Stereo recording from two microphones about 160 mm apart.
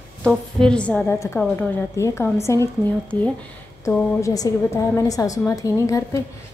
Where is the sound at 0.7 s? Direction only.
5° left (ahead or behind).